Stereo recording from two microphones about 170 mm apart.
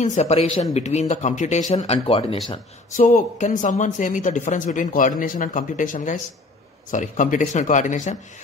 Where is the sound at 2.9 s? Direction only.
50° left (ahead or behind).